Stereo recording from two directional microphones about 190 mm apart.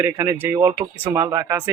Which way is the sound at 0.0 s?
15° right (ahead or behind).